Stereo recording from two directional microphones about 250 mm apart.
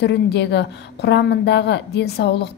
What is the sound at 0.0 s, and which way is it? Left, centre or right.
A woman's voice, left.